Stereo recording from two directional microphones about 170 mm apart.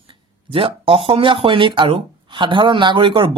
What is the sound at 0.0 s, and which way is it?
Speech, 30° right (ahead or behind).